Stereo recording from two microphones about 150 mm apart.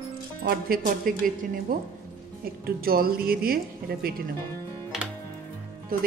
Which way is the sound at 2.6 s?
80° right.